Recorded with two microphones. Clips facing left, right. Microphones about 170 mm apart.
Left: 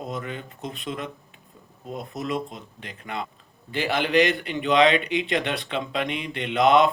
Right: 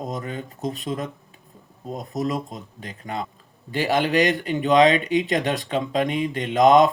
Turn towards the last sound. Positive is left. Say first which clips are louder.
# right 3 dB
turn(degrees=-40)  # may be behind; listen again after turning